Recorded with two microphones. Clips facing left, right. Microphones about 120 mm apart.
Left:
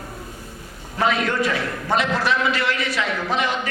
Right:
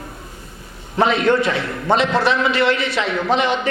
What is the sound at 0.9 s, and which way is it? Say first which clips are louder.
A man's voice: right 5 dB; 25° right (ahead or behind).